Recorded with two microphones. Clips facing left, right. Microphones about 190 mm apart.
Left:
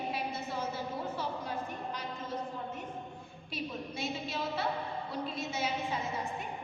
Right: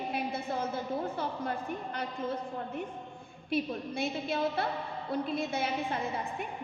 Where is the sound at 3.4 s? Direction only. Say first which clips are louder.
Right 7 dB; 55° right (ahead or behind).